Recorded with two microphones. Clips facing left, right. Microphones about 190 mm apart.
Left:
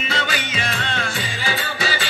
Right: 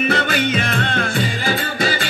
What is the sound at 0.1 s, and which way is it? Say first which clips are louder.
Music: right 7 dB; 55° right (ahead or behind).